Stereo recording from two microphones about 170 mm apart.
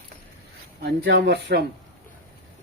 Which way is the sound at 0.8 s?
80° right.